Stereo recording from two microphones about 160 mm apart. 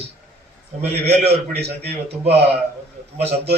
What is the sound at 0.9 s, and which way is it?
Speech, 90° right.